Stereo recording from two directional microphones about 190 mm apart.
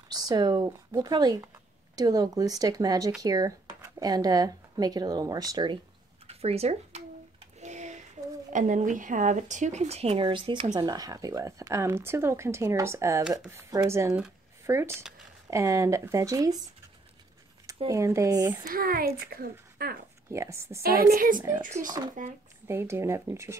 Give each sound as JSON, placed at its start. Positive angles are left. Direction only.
{"t": 0.1, "sound": "speech", "side_deg": -20}
{"t": 6.2, "sound": "speech", "side_deg": -35}
{"t": 7.6, "sound": "a sound", "side_deg": -40}
{"t": 8.5, "sound": "speech", "side_deg": -40}
{"t": 17.8, "sound": "speech", "side_deg": -15}
{"t": 18.6, "sound": "speech", "side_deg": -50}
{"t": 20.2, "sound": "speech", "side_deg": -15}
{"t": 20.8, "sound": "speech", "side_deg": -50}
{"t": 21.4, "sound": "speech", "side_deg": -25}
{"t": 22.2, "sound": "speech", "side_deg": -45}
{"t": 22.7, "sound": "speech", "side_deg": -15}